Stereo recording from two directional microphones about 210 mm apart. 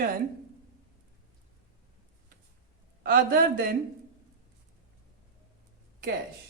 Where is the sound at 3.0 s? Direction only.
45° right (ahead or behind).